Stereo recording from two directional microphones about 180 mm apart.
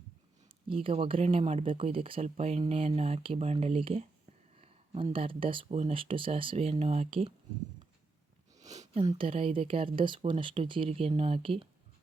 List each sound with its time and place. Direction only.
0.4 s speech: 30° right (ahead or behind)
8.5 s a sound: 40° right (ahead or behind)
9.0 s speech: 30° right (ahead or behind)